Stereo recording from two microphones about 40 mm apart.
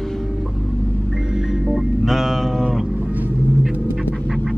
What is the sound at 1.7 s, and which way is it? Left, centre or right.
Music, centre.